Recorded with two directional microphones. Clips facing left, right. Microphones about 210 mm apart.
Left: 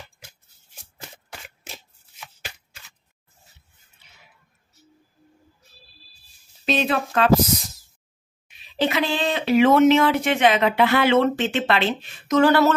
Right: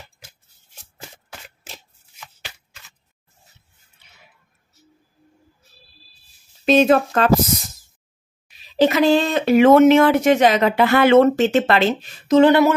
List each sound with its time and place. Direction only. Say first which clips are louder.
6.6 s speech: right 8 dB; 45° right (ahead or behind)
8.5 s speech: right 7 dB; 40° right (ahead or behind)
12.4 s a sound: right 4 dB; 20° right (ahead or behind)